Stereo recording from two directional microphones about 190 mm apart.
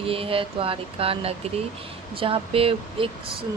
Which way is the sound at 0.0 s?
30° right (ahead or behind).